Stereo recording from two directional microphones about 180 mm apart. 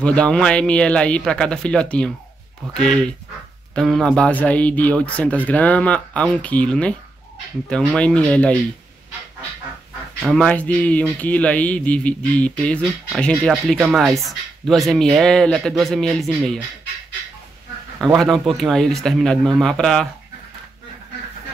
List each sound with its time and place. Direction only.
0.0 s speech: 5° left (ahead or behind)
10.2 s speech: 5° left (ahead or behind)
18.0 s speech: centre (ahead or behind)